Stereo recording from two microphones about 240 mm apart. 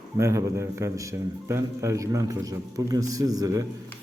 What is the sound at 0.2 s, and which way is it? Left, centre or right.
A man's voice, centre.